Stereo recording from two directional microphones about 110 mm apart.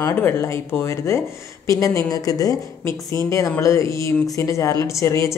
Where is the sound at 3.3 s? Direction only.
30° left (ahead or behind).